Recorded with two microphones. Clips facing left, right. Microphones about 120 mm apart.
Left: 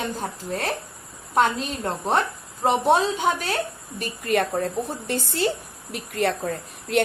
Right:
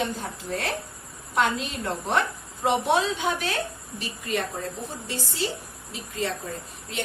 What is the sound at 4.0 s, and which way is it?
A woman's voice, 55° left (ahead or behind).